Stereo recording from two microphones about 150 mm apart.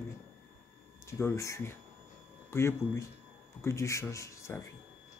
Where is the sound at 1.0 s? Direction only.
20° left (ahead or behind).